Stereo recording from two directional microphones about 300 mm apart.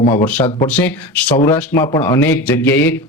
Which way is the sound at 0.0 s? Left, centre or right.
Centre.